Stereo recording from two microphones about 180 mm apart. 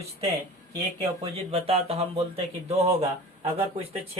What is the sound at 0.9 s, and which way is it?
Speech, 35° right (ahead or behind).